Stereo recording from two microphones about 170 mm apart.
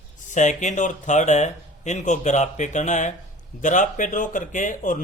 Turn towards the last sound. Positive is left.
turn(degrees=50)  # may be behind; listen again after turning